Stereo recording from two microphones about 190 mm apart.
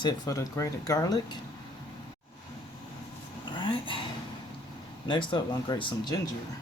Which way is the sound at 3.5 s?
25° left (ahead or behind).